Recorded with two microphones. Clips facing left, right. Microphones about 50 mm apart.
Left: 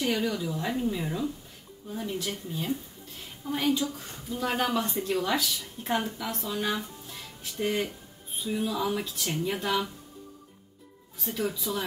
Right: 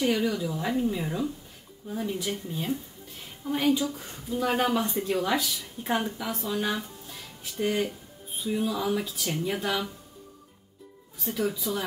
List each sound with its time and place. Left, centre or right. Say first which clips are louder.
0.0 s speech: right 2 dB; centre
11.1 s speech: right 2 dB; centre